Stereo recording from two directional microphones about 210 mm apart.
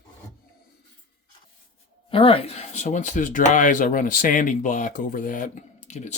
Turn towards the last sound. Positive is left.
turn(degrees=35)  # may be behind; listen again after turning